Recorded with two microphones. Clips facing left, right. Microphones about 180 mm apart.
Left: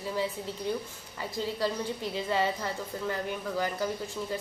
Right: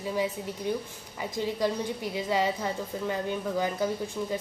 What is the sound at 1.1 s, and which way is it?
A woman's voice, 15° right (ahead or behind).